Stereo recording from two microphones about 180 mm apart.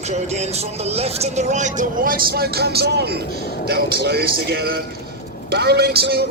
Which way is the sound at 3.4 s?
65° left (ahead or behind).